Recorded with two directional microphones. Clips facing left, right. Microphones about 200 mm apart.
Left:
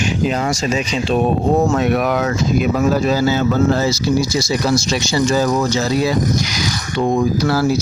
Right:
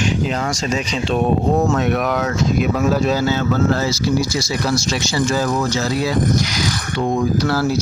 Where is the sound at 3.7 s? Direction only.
15° left (ahead or behind).